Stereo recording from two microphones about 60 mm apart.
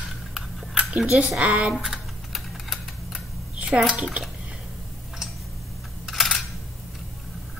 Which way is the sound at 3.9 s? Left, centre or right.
Centre.